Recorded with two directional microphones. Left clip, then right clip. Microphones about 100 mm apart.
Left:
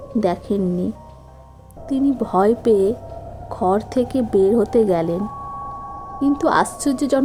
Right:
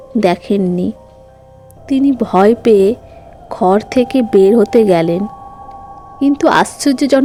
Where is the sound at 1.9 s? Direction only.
40° right (ahead or behind).